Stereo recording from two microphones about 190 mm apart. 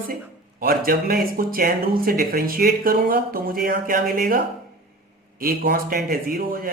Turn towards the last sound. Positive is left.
turn(degrees=-45)  # may be behind; listen again after turning